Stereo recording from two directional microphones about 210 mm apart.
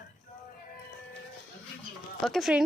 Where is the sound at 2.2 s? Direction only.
Centre (ahead or behind).